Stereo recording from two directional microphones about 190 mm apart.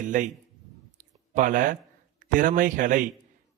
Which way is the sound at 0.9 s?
45° right (ahead or behind).